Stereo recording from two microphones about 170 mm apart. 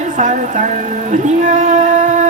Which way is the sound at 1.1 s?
45° right (ahead or behind).